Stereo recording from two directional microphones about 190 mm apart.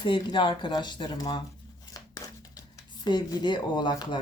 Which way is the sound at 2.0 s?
20° left (ahead or behind).